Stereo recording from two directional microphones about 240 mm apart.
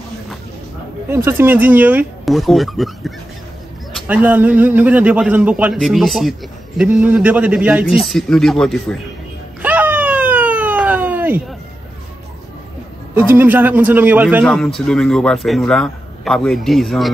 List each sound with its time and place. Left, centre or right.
1.0 s a man's voice: centre
9.6 s a sound: centre
13.1 s a man's voice: centre